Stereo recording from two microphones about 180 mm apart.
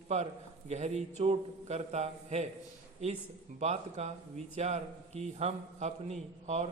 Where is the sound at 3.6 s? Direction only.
40° right (ahead or behind).